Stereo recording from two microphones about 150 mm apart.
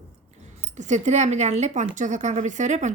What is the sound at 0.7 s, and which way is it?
A woman's voice, 55° right (ahead or behind).